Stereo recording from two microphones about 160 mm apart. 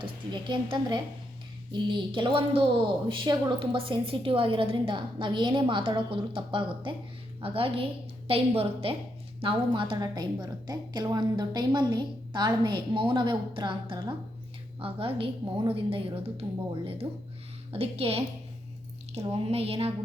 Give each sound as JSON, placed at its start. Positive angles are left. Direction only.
{"t": 0.0, "sound": "a woman's voice", "side_deg": -30}